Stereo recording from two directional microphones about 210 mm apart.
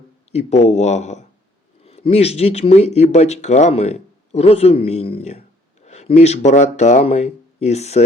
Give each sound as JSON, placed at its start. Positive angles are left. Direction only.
{"t": 0.3, "sound": "speech", "side_deg": 30}